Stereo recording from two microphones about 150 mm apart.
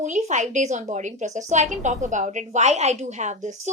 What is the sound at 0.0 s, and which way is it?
A woman's voice, 50° right (ahead or behind).